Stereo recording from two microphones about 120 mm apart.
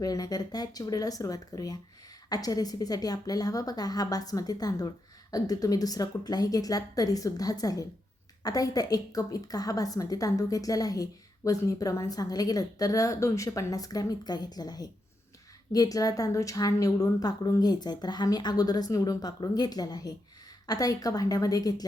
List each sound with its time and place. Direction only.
0.0 s a woman's voice: 30° left (ahead or behind)